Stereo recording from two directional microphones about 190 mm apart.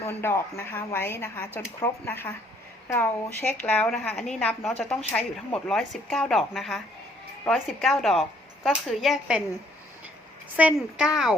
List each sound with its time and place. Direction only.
0.0 s speech: 15° left (ahead or behind)
3.6 s a woman's voice: 10° left (ahead or behind)
10.6 s a woman's voice: 5° right (ahead or behind)